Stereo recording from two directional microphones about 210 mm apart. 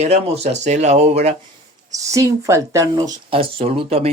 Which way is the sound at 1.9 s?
15° right (ahead or behind).